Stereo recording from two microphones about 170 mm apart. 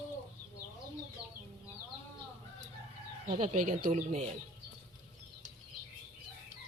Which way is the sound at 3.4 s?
50° right (ahead or behind).